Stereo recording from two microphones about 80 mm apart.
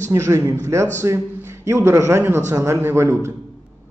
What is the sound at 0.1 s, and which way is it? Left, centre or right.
A man's voice, right.